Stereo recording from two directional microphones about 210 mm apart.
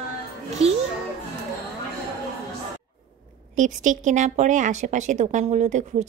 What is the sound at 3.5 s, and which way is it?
Speech, 35° right (ahead or behind).